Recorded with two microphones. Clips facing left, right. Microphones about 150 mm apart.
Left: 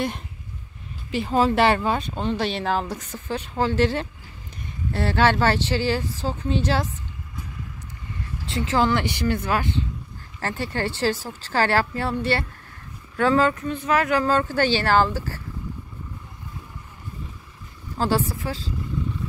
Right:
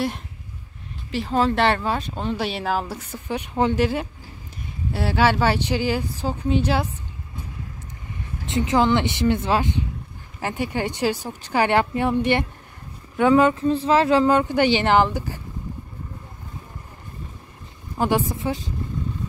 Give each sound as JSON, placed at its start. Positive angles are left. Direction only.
{"t": 1.1, "sound": "speech", "side_deg": 0}
{"t": 8.5, "sound": "speech", "side_deg": -20}
{"t": 13.7, "sound": "speech", "side_deg": -30}
{"t": 17.9, "sound": "speech", "side_deg": -15}